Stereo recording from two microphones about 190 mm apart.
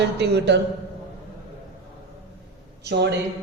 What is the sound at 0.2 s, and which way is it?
Speech, 65° right (ahead or behind).